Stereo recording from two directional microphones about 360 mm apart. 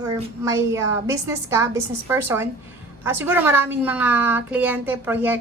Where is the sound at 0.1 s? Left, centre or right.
Centre.